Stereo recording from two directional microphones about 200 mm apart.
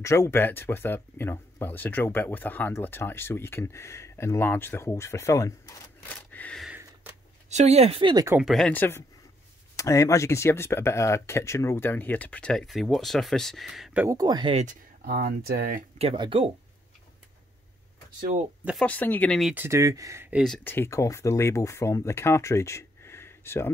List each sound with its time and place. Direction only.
0.0 s speech: 15° left (ahead or behind)
6.0 s gasp: 5° left (ahead or behind)
6.7 s a sound: 10° right (ahead or behind)
7.4 s speech: 35° right (ahead or behind)
8.4 s speech: centre (ahead or behind)
14.0 s speech: 20° right (ahead or behind)
15.0 s speech: 55° right (ahead or behind)
16.0 s speech: 25° right (ahead or behind)
18.6 s speech: 5° right (ahead or behind)
18.9 s speech: 10° left (ahead or behind)
19.5 s speech: 10° right (ahead or behind); by 23.7 s 10° left (ahead or behind)